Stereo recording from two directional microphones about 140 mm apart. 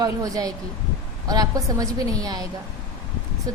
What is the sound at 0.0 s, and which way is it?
A woman's voice, 25° right (ahead or behind).